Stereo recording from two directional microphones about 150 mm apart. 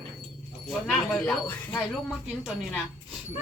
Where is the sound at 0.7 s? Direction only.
Centre (ahead or behind).